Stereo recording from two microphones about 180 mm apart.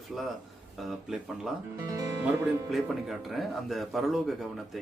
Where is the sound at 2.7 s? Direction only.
Centre (ahead or behind).